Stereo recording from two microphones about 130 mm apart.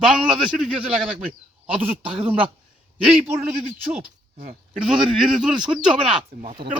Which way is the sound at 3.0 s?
5° right (ahead or behind).